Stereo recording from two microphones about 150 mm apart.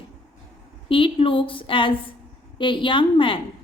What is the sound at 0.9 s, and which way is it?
A woman's voice, 35° left (ahead or behind).